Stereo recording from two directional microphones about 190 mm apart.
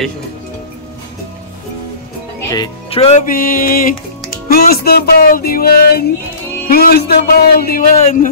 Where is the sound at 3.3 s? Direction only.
50° left (ahead or behind).